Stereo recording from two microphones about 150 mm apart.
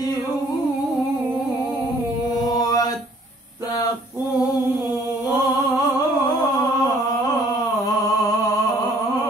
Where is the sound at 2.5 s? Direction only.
25° left (ahead or behind).